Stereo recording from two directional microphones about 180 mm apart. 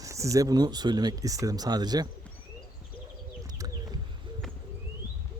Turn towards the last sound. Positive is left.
turn(degrees=-20)  # may be behind; listen again after turning